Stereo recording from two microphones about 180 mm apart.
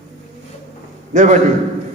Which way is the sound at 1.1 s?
45° right (ahead or behind).